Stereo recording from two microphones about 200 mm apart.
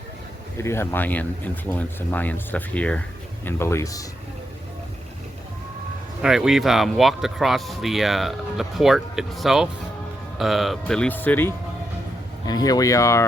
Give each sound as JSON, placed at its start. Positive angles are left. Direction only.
{"t": 0.5, "sound": "speech", "side_deg": 15}
{"t": 6.2, "sound": "speech", "side_deg": 0}